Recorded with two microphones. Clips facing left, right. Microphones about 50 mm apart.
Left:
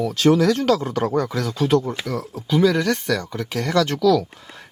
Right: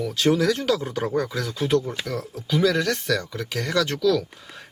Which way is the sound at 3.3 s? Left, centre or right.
Left.